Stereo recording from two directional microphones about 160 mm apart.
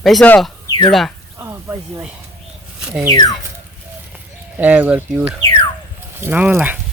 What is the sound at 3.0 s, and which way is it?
Speech, 20° left (ahead or behind).